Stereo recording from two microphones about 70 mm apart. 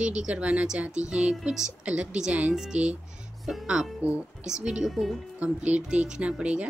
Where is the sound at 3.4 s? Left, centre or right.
Centre.